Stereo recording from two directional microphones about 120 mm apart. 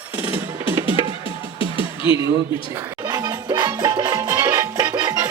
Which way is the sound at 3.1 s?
35° right (ahead or behind).